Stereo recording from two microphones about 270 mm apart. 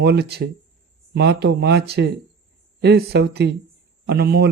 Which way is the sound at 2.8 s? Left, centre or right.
Right.